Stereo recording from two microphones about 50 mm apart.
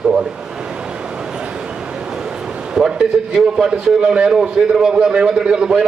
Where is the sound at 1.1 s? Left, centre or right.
Centre.